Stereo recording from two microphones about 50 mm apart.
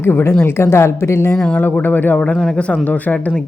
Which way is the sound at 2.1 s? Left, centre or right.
Centre.